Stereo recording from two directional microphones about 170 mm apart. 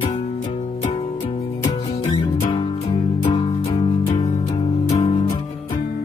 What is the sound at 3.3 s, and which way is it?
Music, 30° left (ahead or behind).